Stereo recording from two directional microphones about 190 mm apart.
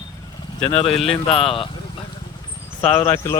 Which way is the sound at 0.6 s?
30° left (ahead or behind).